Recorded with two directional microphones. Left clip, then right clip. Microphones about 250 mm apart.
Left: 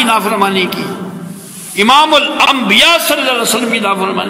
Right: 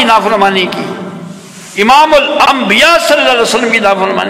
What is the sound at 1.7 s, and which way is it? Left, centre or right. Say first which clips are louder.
A man's voice: right 2 dB; left.